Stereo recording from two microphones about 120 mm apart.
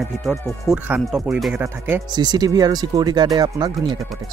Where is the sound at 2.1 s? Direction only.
35° right (ahead or behind).